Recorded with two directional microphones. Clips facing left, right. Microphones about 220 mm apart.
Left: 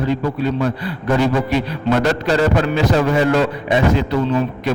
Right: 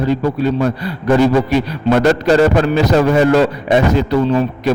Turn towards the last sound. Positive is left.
turn(degrees=-40)  # may be behind; listen again after turning